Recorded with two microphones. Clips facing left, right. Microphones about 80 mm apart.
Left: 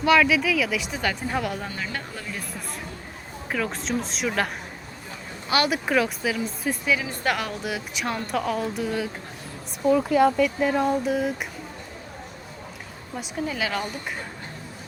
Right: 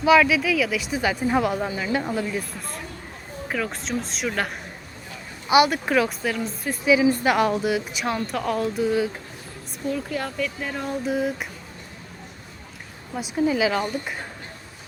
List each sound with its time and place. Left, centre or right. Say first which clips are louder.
0.0 s a woman's voice: right 2 dB; centre
5.6 s a woman's voice: right 1 dB; centre
10.1 s a woman's voice: left 9 dB; centre
13.1 s a woman's voice: right 7 dB; centre